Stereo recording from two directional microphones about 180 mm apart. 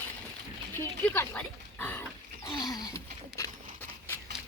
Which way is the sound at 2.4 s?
20° left (ahead or behind).